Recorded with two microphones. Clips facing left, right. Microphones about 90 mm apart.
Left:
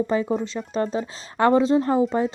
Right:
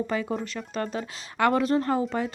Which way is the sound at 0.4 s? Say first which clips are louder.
Left 6 dB; 25° left (ahead or behind).